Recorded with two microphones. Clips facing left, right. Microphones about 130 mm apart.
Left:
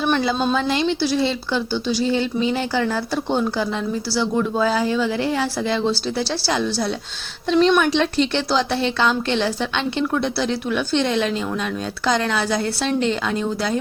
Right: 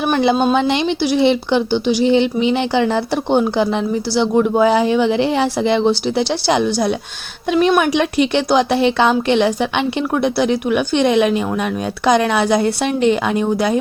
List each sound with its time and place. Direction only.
0.0 s speech: 15° right (ahead or behind)